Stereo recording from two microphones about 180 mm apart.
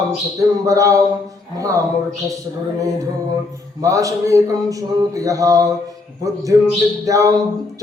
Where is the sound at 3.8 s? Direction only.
20° right (ahead or behind).